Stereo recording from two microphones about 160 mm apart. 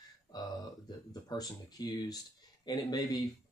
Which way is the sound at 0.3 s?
25° left (ahead or behind).